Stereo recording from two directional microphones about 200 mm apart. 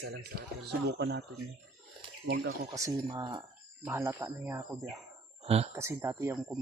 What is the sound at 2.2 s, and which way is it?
Speech, 55° right (ahead or behind).